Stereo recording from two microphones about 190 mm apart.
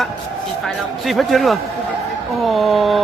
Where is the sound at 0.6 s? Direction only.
Centre (ahead or behind).